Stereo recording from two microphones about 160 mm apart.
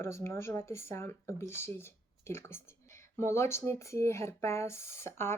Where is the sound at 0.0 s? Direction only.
15° left (ahead or behind).